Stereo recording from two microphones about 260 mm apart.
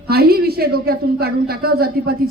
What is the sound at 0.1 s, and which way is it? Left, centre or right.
A man's voice, right.